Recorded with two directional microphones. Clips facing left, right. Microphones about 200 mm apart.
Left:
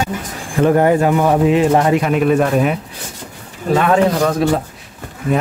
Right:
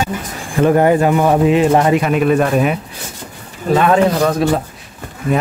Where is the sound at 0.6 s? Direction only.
10° right (ahead or behind).